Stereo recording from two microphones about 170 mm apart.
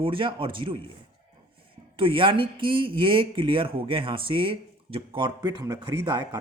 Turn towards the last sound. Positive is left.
turn(degrees=-20)  # may be behind; listen again after turning